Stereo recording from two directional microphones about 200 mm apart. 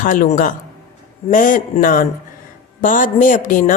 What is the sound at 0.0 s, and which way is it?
A woman's voice, 40° left (ahead or behind).